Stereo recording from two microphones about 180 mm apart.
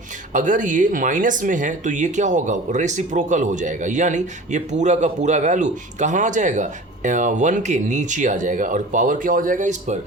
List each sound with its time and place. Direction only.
0.3 s speech: 45° right (ahead or behind)